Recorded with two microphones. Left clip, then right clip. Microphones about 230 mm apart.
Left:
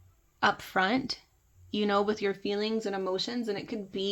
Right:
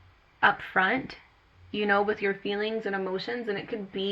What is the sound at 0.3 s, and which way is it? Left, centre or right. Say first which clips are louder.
Speech: right 3 dB; left.